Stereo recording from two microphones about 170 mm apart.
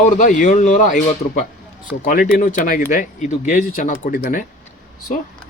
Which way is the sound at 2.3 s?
50° left (ahead or behind).